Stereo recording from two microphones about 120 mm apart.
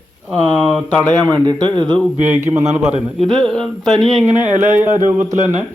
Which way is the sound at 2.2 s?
20° right (ahead or behind).